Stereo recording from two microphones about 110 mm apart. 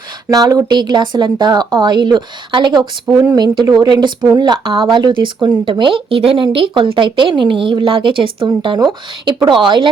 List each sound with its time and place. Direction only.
0.3 s speech: 35° right (ahead or behind)